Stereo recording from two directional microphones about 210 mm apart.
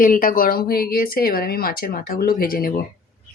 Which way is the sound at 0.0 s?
40° left (ahead or behind).